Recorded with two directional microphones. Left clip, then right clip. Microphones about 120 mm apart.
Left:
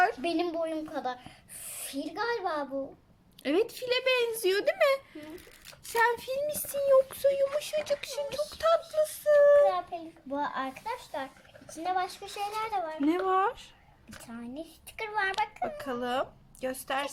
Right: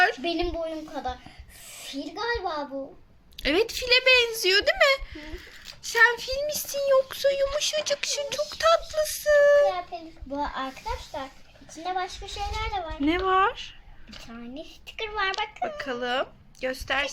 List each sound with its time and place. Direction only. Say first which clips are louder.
0.0 s a child's voice: right 3 dB; centre (ahead or behind)
3.3 s speech: right 4 dB; 15° left (ahead or behind)
8.0 s a sound: right 5 dB; 10° left (ahead or behind)
9.0 s speech: right 2 dB; 20° left (ahead or behind)
9.6 s a child's voice: right 1 dB; centre (ahead or behind)
14.6 s a child's voice: right 5 dB; 30° right (ahead or behind)
15.6 s a child's voice: right 4 dB; 5° right (ahead or behind)